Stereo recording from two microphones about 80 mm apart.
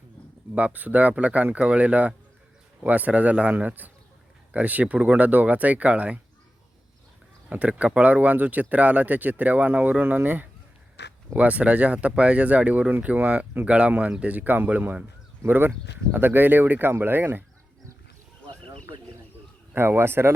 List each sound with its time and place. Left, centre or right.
0.5 s speech: centre
7.5 s speech: centre
19.7 s speech: right